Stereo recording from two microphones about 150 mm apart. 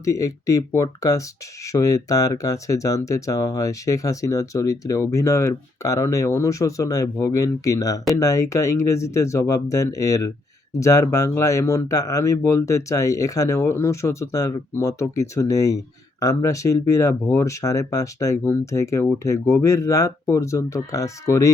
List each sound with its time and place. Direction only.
0.0 s speech: 20° left (ahead or behind)